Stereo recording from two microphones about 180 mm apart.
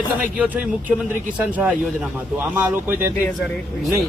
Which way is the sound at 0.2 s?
10° right (ahead or behind).